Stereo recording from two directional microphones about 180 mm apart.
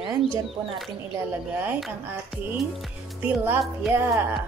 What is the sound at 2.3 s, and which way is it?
A woman's voice, centre (ahead or behind).